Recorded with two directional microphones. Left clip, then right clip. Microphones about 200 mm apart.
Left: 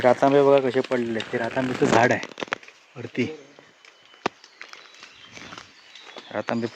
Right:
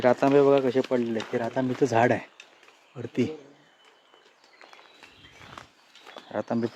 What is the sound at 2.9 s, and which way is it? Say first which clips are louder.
Speech: left 1 dB; 15° right (ahead or behind).